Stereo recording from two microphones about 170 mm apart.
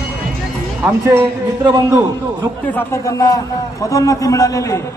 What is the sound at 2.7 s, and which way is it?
A man's voice, 15° left (ahead or behind).